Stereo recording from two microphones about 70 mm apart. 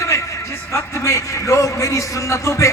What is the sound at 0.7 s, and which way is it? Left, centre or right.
A man's voice, left.